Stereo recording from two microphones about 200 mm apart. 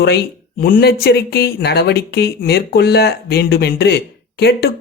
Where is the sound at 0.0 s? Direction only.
55° left (ahead or behind).